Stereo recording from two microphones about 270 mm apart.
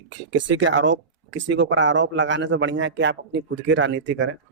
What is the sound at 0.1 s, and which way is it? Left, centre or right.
Speech, right.